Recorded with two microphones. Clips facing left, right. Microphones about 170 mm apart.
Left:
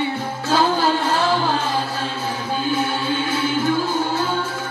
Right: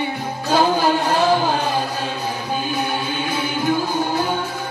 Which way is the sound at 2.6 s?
15° right (ahead or behind).